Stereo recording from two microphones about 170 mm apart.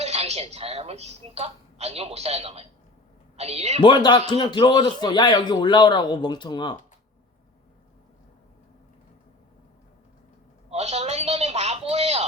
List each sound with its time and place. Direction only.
0.0 s a woman's voice: 40° right (ahead or behind)
3.8 s a man's voice: 25° left (ahead or behind)
10.7 s a sound: 40° right (ahead or behind)